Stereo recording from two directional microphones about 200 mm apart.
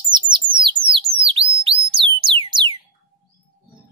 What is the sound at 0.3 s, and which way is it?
Bird, 25° right (ahead or behind).